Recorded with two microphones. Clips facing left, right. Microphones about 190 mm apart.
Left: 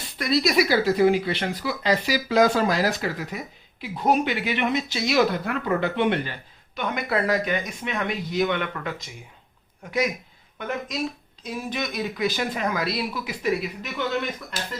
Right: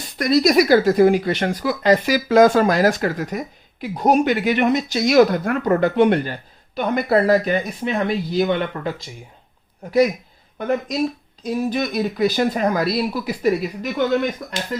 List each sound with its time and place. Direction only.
0.2 s speech: 45° right (ahead or behind)